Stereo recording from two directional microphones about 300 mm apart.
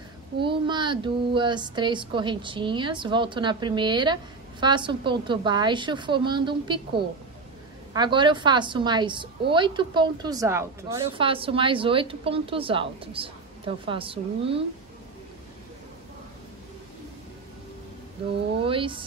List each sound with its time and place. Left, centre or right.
0.5 s speech: centre
7.9 s speech: centre
18.6 s speech: centre